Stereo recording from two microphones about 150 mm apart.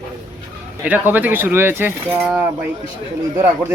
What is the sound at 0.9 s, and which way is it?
Speech, 10° right (ahead or behind).